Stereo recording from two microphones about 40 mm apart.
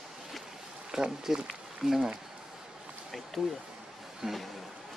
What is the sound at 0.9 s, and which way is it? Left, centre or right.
Speech, centre.